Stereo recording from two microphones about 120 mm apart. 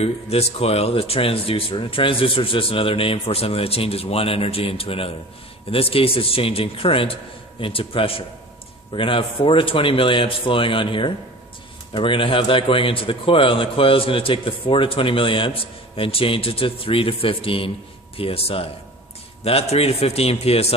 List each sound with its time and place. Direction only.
0.0 s a man's voice: 60° left (ahead or behind)